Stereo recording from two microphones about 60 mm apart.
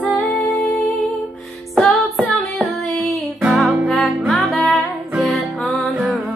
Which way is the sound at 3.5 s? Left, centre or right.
Centre.